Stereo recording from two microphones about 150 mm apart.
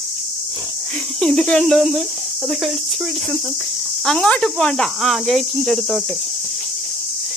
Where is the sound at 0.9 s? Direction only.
5° left (ahead or behind).